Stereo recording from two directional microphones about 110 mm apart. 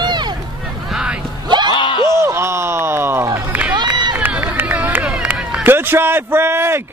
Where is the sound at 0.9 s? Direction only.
10° right (ahead or behind).